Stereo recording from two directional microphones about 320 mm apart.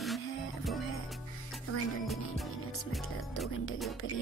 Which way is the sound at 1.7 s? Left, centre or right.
Left.